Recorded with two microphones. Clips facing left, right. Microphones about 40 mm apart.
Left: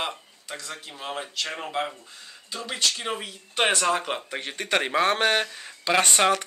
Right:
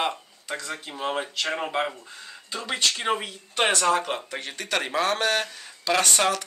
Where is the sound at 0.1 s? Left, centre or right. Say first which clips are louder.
Right 4 dB; centre.